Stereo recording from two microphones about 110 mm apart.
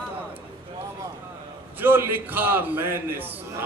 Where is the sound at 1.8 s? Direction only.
20° right (ahead or behind).